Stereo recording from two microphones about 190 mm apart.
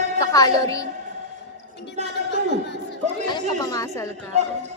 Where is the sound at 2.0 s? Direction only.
40° right (ahead or behind).